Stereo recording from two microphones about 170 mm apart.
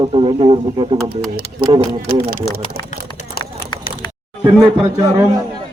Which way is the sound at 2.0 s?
65° right (ahead or behind).